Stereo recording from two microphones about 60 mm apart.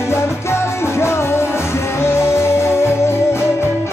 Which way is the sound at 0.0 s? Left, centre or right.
Left.